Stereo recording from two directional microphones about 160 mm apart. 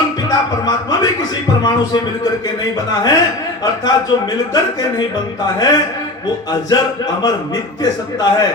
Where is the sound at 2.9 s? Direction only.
25° left (ahead or behind).